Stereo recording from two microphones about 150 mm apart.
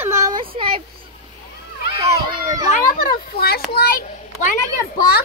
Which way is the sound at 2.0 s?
25° right (ahead or behind).